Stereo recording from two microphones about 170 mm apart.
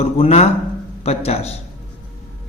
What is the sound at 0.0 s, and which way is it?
A man's voice, 40° left (ahead or behind).